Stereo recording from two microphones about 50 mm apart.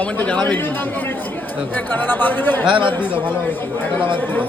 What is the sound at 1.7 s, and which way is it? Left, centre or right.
Speech, left.